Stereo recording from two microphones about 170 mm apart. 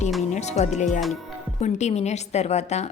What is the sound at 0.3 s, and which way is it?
A woman's voice, 40° left (ahead or behind).